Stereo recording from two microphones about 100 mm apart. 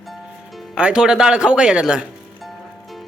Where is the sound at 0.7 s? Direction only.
10° right (ahead or behind).